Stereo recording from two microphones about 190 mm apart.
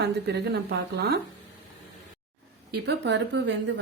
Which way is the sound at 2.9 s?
70° right (ahead or behind).